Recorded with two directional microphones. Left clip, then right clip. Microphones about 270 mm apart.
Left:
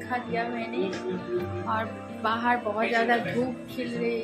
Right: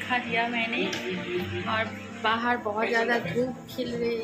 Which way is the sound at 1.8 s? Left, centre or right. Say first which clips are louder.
Right 1 dB; centre.